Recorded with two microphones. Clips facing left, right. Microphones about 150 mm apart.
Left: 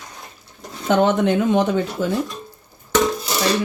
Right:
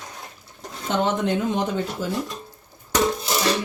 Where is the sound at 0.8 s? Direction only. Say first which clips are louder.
Left 6 dB; 65° left (ahead or behind).